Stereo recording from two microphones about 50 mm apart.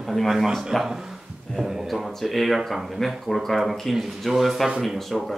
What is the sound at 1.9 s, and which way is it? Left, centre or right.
Speech, centre.